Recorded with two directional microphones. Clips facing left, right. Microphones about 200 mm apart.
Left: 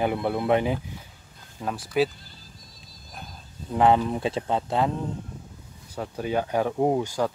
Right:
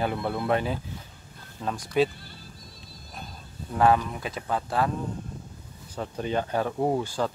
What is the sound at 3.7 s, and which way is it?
Speech, 20° left (ahead or behind).